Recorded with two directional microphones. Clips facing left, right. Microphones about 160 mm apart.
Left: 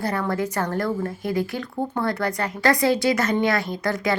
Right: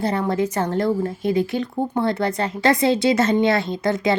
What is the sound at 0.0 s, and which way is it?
A woman's voice, 25° right (ahead or behind).